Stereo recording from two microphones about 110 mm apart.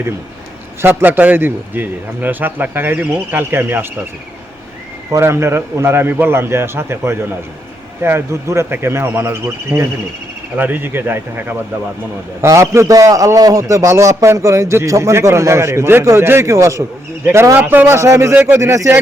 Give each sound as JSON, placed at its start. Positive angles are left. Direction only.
{"t": 0.8, "sound": "a man's voice", "side_deg": -20}
{"t": 5.1, "sound": "a man's voice", "side_deg": -25}